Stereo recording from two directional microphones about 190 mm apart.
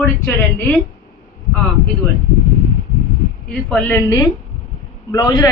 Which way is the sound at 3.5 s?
5° left (ahead or behind).